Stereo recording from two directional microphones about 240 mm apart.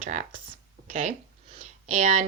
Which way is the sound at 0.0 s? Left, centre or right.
Right.